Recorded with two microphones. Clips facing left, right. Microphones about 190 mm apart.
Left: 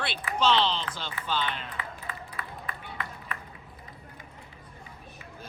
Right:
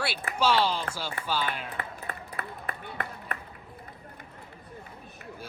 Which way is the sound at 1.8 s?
55° right (ahead or behind).